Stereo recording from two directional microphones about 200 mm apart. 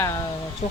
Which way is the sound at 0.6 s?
30° left (ahead or behind).